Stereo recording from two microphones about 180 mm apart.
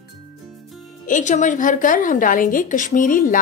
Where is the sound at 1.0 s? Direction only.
45° left (ahead or behind).